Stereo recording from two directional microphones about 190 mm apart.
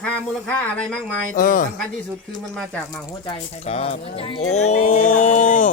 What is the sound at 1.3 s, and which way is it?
Music, 45° left (ahead or behind).